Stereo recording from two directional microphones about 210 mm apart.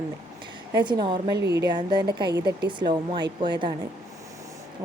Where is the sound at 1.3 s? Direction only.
55° right (ahead or behind).